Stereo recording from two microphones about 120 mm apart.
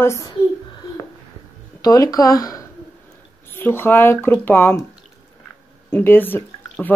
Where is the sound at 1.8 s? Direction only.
30° left (ahead or behind); by 4.8 s 10° left (ahead or behind).